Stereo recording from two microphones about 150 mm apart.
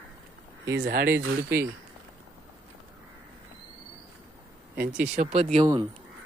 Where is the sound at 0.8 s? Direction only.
85° right.